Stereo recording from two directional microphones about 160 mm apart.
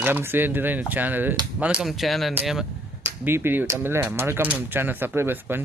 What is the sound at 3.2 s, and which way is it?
Speech, 15° right (ahead or behind).